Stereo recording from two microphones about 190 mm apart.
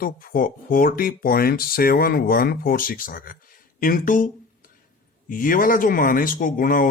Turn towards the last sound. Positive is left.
turn(degrees=45)  # may be behind; listen again after turning